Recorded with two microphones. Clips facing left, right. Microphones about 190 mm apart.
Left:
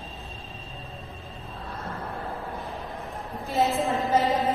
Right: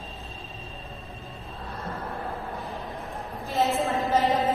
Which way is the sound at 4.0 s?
Centre (ahead or behind).